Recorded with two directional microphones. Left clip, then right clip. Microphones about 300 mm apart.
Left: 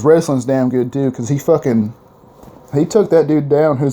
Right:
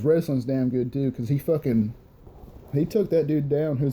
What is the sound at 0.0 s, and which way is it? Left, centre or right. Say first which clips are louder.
Speech: left 11 dB; left.